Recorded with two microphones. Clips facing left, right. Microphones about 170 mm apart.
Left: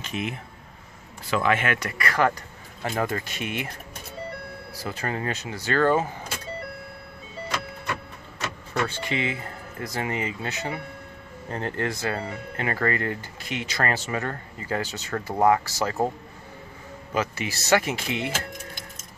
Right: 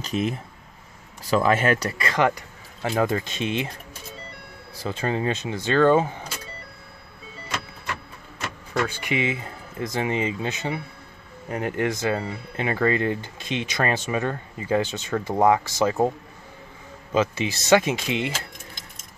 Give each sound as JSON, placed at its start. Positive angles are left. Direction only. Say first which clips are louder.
{"t": 0.0, "sound": "speech", "louder": "right 5 dB", "side_deg": -35}
{"t": 2.0, "sound": "speech", "louder": "right 1 dB", "side_deg": -20}
{"t": 4.8, "sound": "speech", "louder": "right 5 dB", "side_deg": -20}
{"t": 8.8, "sound": "speech", "louder": "right 2 dB", "side_deg": -15}
{"t": 17.1, "sound": "speech", "louder": "right 5 dB", "side_deg": -20}